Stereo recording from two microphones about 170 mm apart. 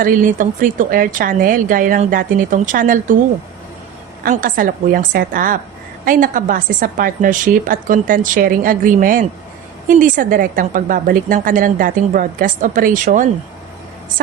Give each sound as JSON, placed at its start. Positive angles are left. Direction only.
{"t": 0.0, "sound": "a woman's voice", "side_deg": -55}
{"t": 4.2, "sound": "a woman's voice", "side_deg": -55}